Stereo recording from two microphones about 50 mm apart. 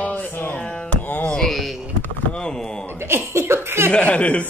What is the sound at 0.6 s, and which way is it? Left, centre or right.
Music, centre.